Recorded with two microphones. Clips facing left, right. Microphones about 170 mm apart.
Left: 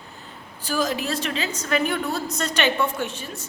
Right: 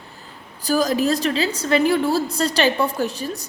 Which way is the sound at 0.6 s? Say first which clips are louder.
Right 6 dB; 40° right (ahead or behind).